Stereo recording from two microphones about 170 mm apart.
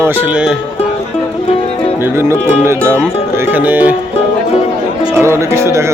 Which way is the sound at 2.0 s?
15° right (ahead or behind).